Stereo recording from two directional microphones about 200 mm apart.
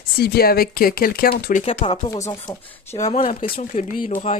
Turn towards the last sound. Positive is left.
turn(degrees=40)  # may be behind; listen again after turning